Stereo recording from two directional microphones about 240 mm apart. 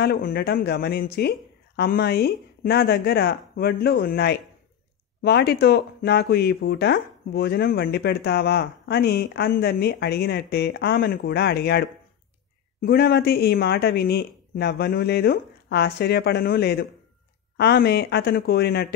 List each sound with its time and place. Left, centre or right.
0.0 s speech: left
12.8 s speech: left